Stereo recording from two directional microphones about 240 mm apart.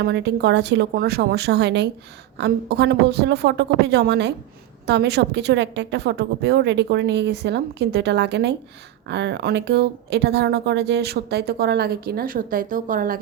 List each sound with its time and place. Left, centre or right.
0.0 s a woman's voice: right